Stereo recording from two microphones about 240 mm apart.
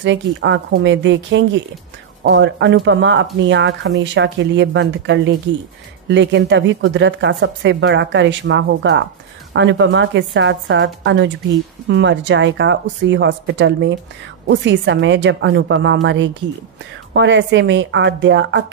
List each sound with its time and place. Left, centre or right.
0.0 s speech: right